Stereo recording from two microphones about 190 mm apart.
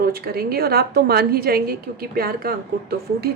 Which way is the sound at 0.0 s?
55° right (ahead or behind).